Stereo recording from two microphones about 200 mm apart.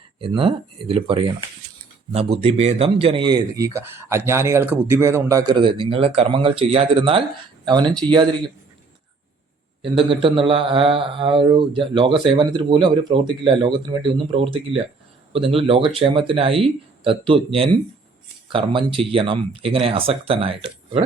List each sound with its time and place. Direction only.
0.2 s speech: 25° right (ahead or behind)
9.8 s speech: 25° right (ahead or behind)